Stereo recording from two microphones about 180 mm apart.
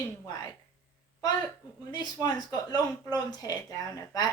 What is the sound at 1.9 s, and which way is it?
Speech, 25° left (ahead or behind).